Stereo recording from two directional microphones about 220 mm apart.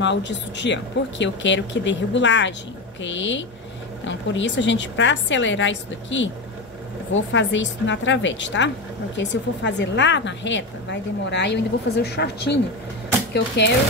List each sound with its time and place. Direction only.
0.0 s a woman's voice: 55° left (ahead or behind)
13.6 s speech: 50° left (ahead or behind)